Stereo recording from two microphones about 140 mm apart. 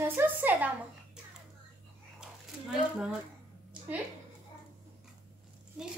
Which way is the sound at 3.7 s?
5° right (ahead or behind).